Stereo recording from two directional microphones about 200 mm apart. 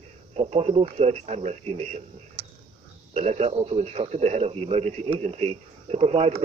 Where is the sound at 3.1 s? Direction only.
30° right (ahead or behind).